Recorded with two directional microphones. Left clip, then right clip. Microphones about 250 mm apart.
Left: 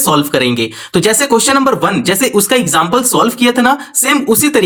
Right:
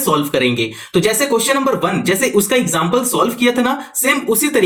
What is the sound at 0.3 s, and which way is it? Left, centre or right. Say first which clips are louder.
Speech: left 3 dB; left.